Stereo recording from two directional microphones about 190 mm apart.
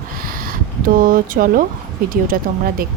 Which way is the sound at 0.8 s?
45° right (ahead or behind).